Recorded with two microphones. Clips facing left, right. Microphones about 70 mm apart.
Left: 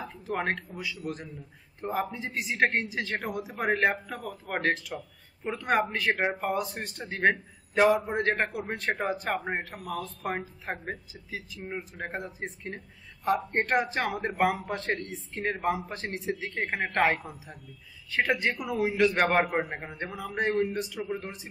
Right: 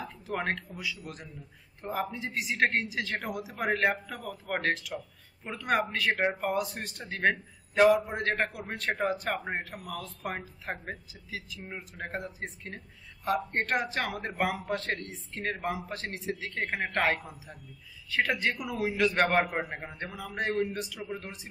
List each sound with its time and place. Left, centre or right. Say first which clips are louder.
0.0 s a man's voice: left 2 dB; centre
2.5 s a man's voice: left 1 dB; centre
12.2 s a man's voice: left 2 dB; centre
12.6 s speech: left 4 dB; centre
16.3 s a man's voice: left 2 dB; centre